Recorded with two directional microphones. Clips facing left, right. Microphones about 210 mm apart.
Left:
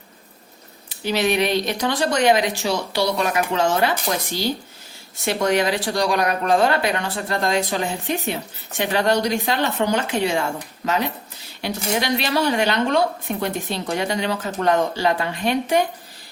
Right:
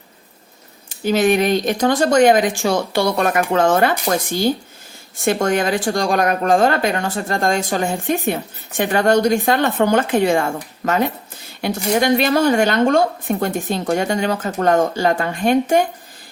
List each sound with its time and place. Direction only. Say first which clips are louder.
0.9 s a woman's voice: right 5 dB; 45° right (ahead or behind)